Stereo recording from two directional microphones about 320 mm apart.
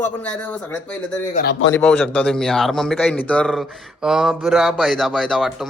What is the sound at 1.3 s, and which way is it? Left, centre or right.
Speech, left.